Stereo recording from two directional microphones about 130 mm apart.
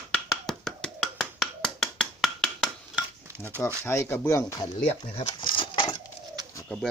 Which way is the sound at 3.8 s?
20° left (ahead or behind).